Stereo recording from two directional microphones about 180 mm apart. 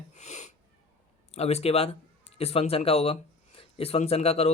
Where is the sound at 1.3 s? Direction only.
35° left (ahead or behind).